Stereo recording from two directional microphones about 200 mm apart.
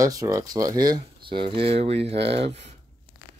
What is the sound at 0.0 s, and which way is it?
Speech, 15° right (ahead or behind).